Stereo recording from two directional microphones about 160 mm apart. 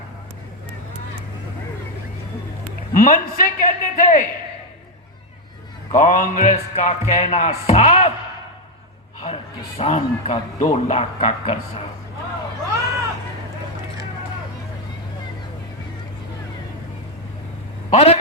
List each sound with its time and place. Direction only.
2.9 s a man's voice: 60° left (ahead or behind)
5.9 s a man's voice: 60° left (ahead or behind)
9.2 s a man's voice: 40° left (ahead or behind)
17.9 s a man's voice: 40° left (ahead or behind)